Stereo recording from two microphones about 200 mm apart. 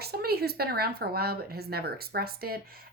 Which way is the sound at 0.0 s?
50° right (ahead or behind).